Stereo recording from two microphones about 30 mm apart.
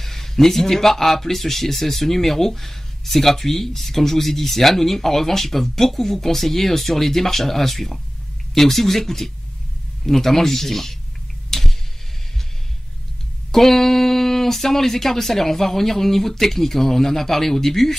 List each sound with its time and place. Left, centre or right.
0.0 s speech: centre
11.5 s a sound: centre
13.5 s speech: centre